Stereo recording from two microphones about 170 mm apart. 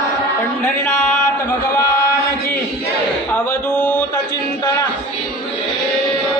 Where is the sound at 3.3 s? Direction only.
10° left (ahead or behind).